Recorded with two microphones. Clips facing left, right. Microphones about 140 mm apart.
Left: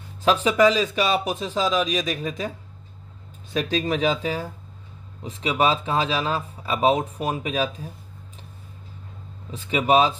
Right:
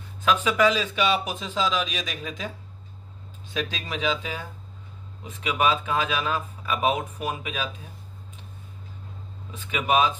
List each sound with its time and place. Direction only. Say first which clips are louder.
0.2 s speech: left 3 dB; 35° left (ahead or behind)
3.5 s speech: left 7 dB; 45° left (ahead or behind)
9.5 s speech: left 5 dB; 35° left (ahead or behind)